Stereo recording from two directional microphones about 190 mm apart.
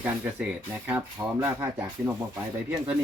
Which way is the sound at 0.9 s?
10° right (ahead or behind).